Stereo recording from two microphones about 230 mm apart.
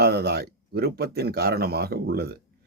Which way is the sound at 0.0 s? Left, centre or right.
Right.